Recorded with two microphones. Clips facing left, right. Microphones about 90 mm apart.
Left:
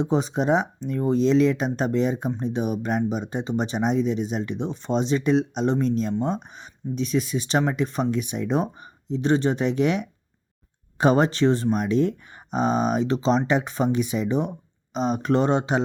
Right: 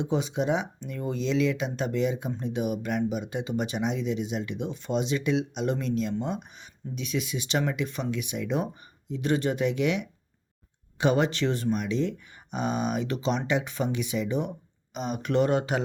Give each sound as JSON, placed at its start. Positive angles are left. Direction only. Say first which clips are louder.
{"t": 0.0, "sound": "speech", "louder": "left 4 dB", "side_deg": 35}